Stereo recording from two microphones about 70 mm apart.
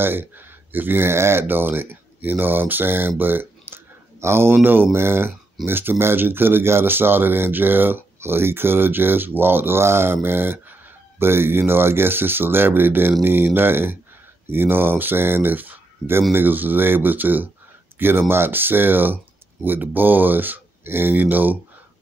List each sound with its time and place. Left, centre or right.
0.0 s speech: right